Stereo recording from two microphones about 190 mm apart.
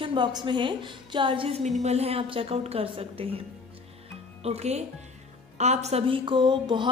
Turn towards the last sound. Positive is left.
turn(degrees=-25)  # may be behind; listen again after turning